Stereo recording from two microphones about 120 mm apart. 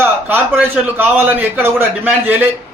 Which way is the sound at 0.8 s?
15° right (ahead or behind).